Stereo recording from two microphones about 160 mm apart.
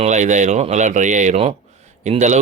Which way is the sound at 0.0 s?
50° right (ahead or behind).